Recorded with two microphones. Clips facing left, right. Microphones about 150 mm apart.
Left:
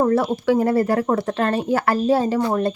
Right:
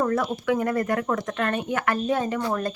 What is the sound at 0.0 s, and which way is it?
Speech, 30° left (ahead or behind).